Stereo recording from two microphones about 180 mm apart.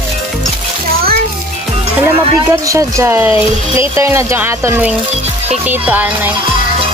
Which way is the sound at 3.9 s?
15° right (ahead or behind).